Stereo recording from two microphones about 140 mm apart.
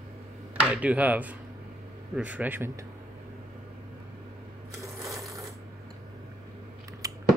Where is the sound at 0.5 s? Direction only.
10° right (ahead or behind).